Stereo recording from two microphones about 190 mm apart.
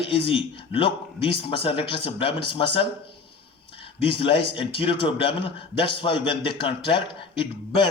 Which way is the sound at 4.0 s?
30° left (ahead or behind).